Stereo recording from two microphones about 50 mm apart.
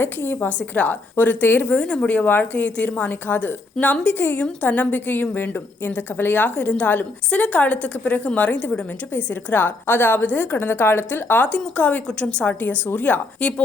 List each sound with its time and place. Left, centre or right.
0.0 s a woman's voice: left
1.8 s speech: centre
2.2 s a woman's voice: left
9.1 s a woman's voice: left
11.4 s speech: left
12.0 s speech: centre
12.5 s a woman's voice: left